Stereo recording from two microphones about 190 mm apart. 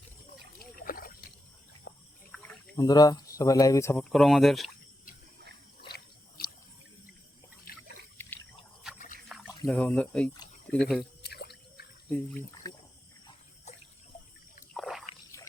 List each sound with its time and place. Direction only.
0.6 s dog: 50° left (ahead or behind)
1.9 s water: 55° left (ahead or behind)
2.7 s speech: 20° left (ahead or behind)
4.1 s speech: centre (ahead or behind)
5.9 s a sound: 55° left (ahead or behind)
7.7 s trickle: 50° left (ahead or behind)
8.2 s trickle: 10° left (ahead or behind)
9.3 s a sound: centre (ahead or behind)
9.6 s speech: 5° left (ahead or behind)
11.2 s drip: 60° left (ahead or behind)
12.7 s a sound: 20° left (ahead or behind)
13.7 s water: 35° left (ahead or behind)
14.7 s a sound: centre (ahead or behind)